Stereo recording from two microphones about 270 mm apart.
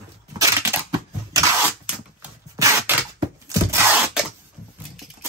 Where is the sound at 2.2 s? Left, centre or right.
Centre.